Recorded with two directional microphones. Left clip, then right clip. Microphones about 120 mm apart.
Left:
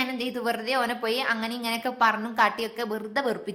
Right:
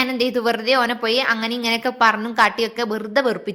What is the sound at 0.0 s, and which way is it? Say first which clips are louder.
A woman's voice: right 9 dB; 50° right (ahead or behind).